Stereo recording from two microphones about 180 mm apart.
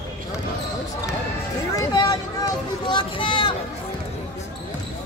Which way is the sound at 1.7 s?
20° left (ahead or behind).